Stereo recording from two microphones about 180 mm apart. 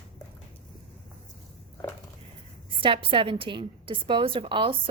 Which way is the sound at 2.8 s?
30° right (ahead or behind).